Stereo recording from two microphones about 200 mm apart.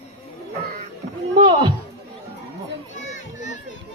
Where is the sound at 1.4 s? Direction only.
25° right (ahead or behind).